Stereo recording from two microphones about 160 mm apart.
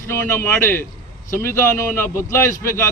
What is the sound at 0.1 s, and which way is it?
Speech, 15° left (ahead or behind).